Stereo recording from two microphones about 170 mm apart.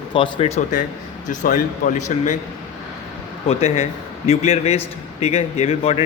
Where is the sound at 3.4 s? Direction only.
40° left (ahead or behind).